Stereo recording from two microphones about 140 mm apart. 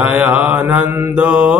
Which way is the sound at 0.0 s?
10° right (ahead or behind).